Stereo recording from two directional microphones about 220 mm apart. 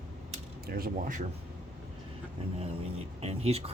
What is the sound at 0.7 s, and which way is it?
Speech, 40° right (ahead or behind).